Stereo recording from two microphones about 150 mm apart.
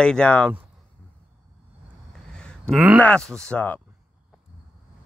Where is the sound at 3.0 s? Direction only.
5° left (ahead or behind).